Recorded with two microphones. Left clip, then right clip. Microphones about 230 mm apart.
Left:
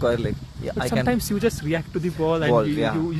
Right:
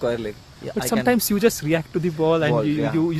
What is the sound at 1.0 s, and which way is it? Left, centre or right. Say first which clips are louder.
Speech: right 4 dB; right.